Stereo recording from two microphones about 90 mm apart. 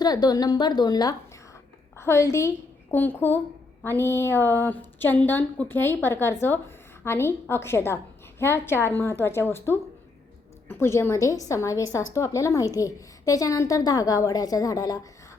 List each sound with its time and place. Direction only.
0.0 s a woman's voice: 45° left (ahead or behind)
2.0 s a woman's voice: 30° left (ahead or behind)
2.9 s a woman's voice: 20° left (ahead or behind); by 15.0 s 40° left (ahead or behind)